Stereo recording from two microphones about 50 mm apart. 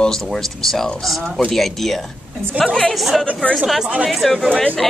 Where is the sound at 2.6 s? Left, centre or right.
Centre.